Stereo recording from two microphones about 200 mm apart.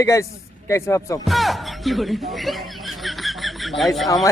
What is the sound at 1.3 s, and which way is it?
Speech, centre (ahead or behind).